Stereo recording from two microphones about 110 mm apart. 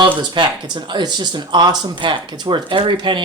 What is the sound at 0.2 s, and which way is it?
Speech, 40° right (ahead or behind).